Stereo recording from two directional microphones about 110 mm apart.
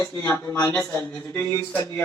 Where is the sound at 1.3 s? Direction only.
35° left (ahead or behind).